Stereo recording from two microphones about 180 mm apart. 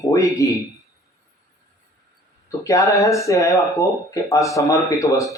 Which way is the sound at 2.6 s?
20° left (ahead or behind).